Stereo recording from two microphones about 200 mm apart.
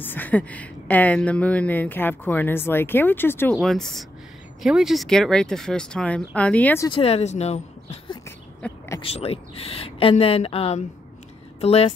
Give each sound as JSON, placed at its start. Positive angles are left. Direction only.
{"t": 0.0, "sound": "speech", "side_deg": 10}
{"t": 6.9, "sound": "speech", "side_deg": 30}
{"t": 8.6, "sound": "speech", "side_deg": 10}
{"t": 9.0, "sound": "speech", "side_deg": 30}